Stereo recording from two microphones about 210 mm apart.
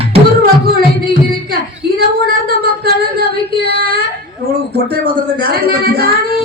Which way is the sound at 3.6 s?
50° right (ahead or behind).